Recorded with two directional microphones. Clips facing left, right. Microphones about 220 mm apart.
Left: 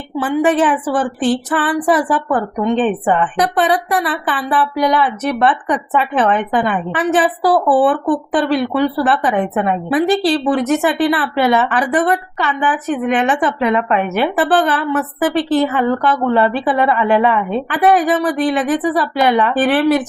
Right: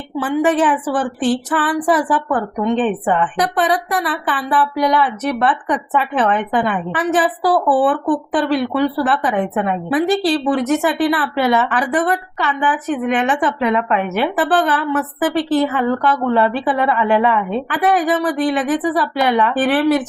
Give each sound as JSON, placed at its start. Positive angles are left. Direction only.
{"t": 0.2, "sound": "speech", "side_deg": 25}